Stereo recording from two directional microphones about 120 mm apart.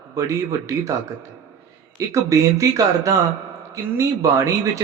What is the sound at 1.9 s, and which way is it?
Speech, 25° right (ahead or behind).